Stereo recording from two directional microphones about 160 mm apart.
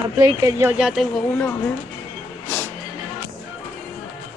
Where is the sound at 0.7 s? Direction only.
5° right (ahead or behind).